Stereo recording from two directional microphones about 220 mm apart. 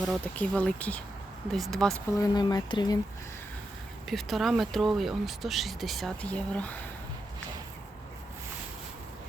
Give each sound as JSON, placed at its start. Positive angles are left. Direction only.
{"t": 0.0, "sound": "speech", "side_deg": 5}
{"t": 2.1, "sound": "speech", "side_deg": 15}
{"t": 4.1, "sound": "speech", "side_deg": 0}